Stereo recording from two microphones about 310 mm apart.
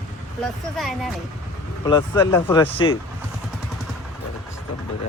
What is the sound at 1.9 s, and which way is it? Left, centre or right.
Speech, centre.